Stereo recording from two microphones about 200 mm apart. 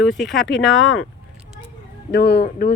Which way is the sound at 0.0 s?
Centre (ahead or behind).